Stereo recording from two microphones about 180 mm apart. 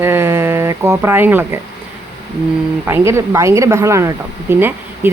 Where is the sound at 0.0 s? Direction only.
15° right (ahead or behind).